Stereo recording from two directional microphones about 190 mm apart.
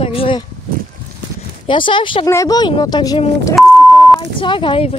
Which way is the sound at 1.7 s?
25° left (ahead or behind).